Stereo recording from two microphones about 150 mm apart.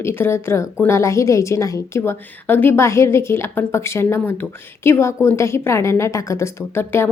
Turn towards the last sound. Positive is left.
turn(degrees=15)  # may be behind; listen again after turning